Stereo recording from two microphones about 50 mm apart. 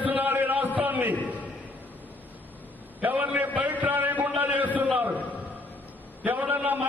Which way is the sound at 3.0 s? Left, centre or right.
Right.